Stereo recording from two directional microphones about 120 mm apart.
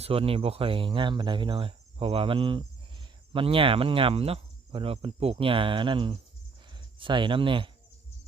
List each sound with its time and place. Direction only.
0.0 s speech: 55° right (ahead or behind)